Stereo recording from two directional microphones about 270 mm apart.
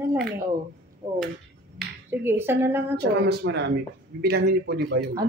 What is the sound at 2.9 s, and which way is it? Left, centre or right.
A man's voice, right.